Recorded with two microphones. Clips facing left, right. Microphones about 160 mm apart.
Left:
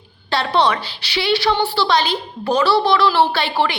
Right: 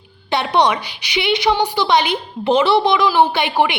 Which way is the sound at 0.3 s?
20° right (ahead or behind).